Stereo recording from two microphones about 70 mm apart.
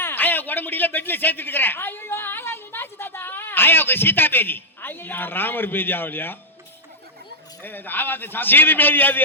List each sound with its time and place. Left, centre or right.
0.0 s a man's voice: left
7.6 s a man's voice: left